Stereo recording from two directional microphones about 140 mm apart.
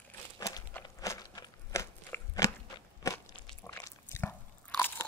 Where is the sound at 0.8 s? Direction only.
25° left (ahead or behind).